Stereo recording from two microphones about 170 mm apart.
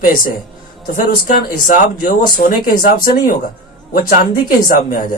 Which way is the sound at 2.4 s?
70° left (ahead or behind).